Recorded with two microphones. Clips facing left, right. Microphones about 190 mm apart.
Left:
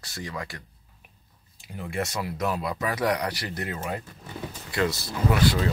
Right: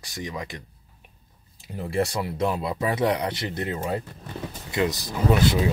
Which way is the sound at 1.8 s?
35° right (ahead or behind).